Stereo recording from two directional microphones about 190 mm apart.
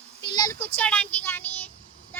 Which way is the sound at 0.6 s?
5° left (ahead or behind).